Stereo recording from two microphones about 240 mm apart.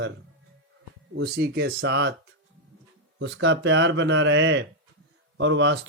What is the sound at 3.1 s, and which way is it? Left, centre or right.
Speech, right.